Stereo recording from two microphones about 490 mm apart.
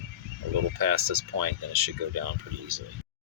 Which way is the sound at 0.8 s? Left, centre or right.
Right.